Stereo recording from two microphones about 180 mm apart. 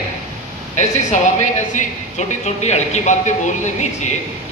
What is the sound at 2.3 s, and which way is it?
Speech, 40° left (ahead or behind).